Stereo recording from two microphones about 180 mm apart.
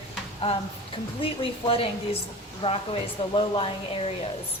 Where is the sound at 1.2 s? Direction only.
30° left (ahead or behind).